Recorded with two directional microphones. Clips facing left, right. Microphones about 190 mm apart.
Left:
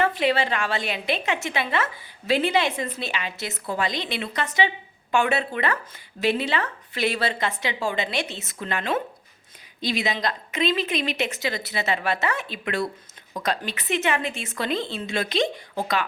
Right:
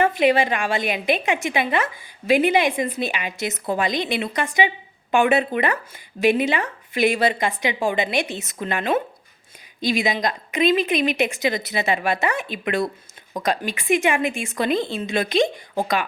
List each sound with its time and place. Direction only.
0.0 s a woman's voice: 15° right (ahead or behind)